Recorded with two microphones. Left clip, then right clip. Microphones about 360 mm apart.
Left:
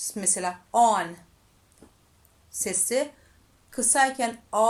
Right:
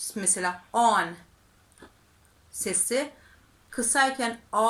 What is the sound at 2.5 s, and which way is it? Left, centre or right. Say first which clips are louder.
A woman's voice: left 1 dB; centre.